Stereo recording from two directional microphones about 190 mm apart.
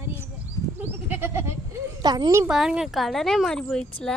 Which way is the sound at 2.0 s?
20° right (ahead or behind).